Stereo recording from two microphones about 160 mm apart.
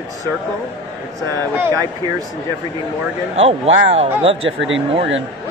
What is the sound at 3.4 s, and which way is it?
Speech, 40° right (ahead or behind).